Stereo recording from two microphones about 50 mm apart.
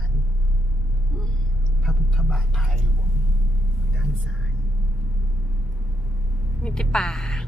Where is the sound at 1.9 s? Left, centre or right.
Centre.